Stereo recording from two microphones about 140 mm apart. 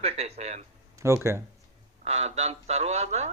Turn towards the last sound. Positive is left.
turn(degrees=-50)  # may be behind; listen again after turning